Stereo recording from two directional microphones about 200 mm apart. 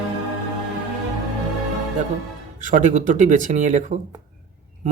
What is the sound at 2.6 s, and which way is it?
A man's voice, 40° right (ahead or behind).